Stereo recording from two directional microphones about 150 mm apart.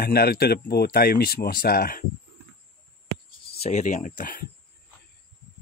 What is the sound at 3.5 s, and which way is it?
Speech, 45° left (ahead or behind).